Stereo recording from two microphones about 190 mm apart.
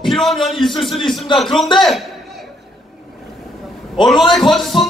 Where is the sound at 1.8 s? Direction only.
Centre (ahead or behind).